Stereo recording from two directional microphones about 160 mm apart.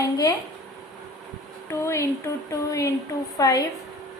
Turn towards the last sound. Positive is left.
turn(degrees=20)  # may be behind; listen again after turning